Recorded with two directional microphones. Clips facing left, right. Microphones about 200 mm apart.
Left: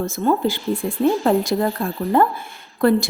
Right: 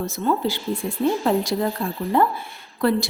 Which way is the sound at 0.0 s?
50° left (ahead or behind).